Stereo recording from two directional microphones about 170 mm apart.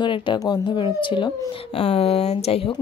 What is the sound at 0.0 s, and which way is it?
A woman's voice, 30° left (ahead or behind).